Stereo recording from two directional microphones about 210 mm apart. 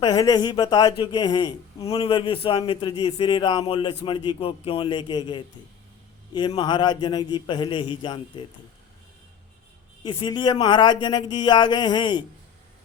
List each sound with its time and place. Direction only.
0.0 s speech: 20° left (ahead or behind)
10.0 s speech: 20° left (ahead or behind)